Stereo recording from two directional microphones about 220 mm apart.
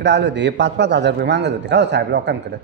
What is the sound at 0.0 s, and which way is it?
A man's voice, 50° right (ahead or behind).